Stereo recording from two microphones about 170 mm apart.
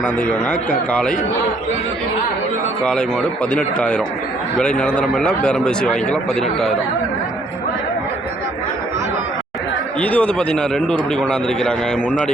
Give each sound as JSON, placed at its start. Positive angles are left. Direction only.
{"t": 0.0, "sound": "speech", "side_deg": 10}
{"t": 3.5, "sound": "a man's voice", "side_deg": 5}
{"t": 10.0, "sound": "a man's voice", "side_deg": 5}